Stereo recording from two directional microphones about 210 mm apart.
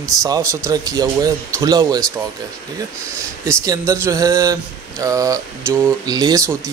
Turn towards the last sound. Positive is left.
turn(degrees=-15)  # may be behind; listen again after turning